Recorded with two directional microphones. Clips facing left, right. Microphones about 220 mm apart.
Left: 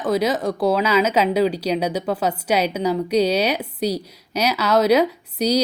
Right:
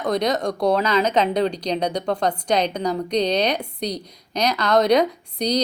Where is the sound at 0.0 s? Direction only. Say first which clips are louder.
Left 1 dB; 5° left (ahead or behind).